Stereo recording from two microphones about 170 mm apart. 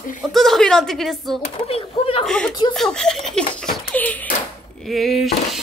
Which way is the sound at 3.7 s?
10° left (ahead or behind).